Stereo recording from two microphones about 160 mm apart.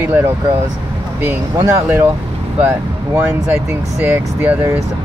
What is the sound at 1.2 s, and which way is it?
Speech, 15° right (ahead or behind).